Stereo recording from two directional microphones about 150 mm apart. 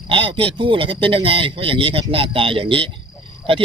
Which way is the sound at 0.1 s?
35° right (ahead or behind).